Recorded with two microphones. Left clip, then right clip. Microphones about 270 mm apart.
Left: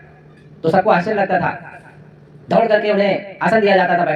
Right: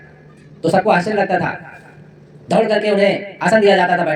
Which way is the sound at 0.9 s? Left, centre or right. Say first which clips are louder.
Even; centre.